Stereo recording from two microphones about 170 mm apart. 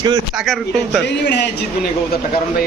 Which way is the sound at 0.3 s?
Centre (ahead or behind).